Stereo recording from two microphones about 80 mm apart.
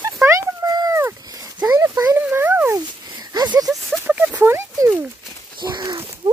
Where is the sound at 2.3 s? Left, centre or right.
Right.